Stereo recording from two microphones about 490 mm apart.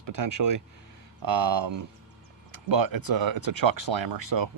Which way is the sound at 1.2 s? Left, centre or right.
Right.